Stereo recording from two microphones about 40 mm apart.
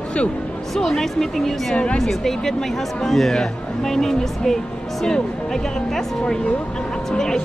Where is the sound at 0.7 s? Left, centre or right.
Centre.